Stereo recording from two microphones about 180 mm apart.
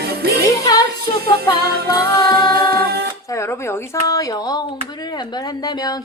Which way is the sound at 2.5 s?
60° right (ahead or behind).